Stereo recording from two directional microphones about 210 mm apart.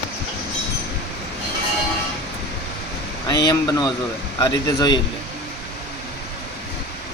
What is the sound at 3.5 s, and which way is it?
A man's voice, 15° left (ahead or behind).